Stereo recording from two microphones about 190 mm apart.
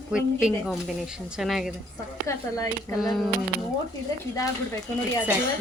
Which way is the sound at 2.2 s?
15° left (ahead or behind).